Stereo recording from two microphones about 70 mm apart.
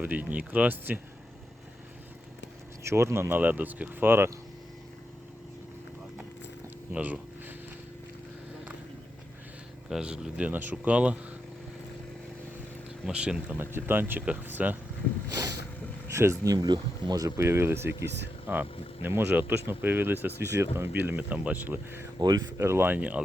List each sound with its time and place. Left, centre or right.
0.0 s speech: right
2.8 s speech: right
6.9 s a sound: right
9.9 s speech: centre
13.1 s speech: centre
13.6 s speech: right
16.0 s speech: right
16.5 s speech: right
17.2 s speech: right
22.2 s speech: right
22.5 s speech: right
23.0 s speech: centre